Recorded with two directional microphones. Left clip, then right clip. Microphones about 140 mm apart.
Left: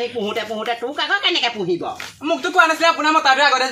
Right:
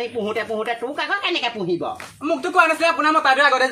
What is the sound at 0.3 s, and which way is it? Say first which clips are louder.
Speech: left 1 dB; 40° right (ahead or behind).